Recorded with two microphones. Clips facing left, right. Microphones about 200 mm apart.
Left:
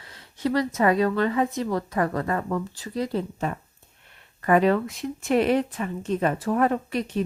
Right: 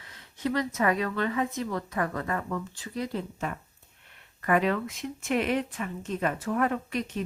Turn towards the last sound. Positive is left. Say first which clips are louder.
# left 5 dB
turn(degrees=35)  # may be behind; listen again after turning